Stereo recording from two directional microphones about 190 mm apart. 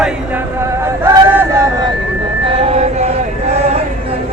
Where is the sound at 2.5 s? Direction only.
30° right (ahead or behind).